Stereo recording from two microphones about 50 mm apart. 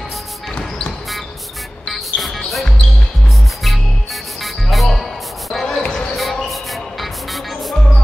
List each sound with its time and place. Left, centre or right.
1.9 s music: centre
3.6 s music: centre
5.8 s basketball bounce: centre
6.1 s music: centre